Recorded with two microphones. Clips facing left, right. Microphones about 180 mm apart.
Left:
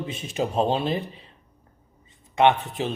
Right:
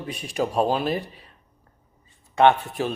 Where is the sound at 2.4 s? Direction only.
20° left (ahead or behind).